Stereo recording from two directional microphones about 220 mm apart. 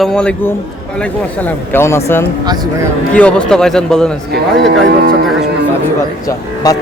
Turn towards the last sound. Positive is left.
turn(degrees=15)  # may be behind; listen again after turning